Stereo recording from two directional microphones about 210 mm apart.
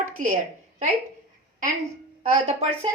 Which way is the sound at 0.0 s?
40° right (ahead or behind).